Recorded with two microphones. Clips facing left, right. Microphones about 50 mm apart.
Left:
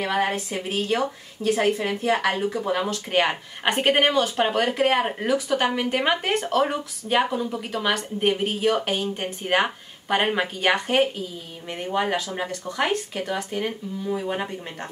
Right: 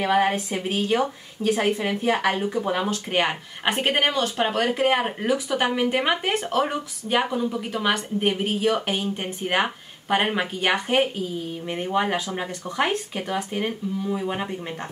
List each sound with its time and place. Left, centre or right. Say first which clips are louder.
0.0 s speech: right 3 dB; centre
2.3 s speech: even; centre
11.6 s speech: even; centre
14.0 s speech: left 2 dB; centre